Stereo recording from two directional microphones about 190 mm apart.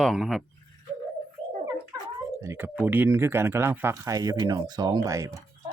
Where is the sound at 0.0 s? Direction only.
Centre (ahead or behind).